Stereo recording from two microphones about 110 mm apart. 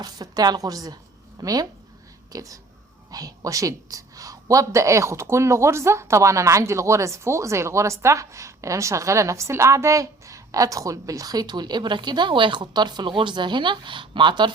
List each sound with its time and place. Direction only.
0.0 s a woman's voice: 35° right (ahead or behind)